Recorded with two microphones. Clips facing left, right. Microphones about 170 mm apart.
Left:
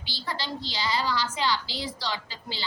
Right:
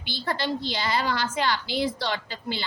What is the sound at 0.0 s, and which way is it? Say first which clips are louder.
A woman's voice: right 6 dB; 55° right (ahead or behind).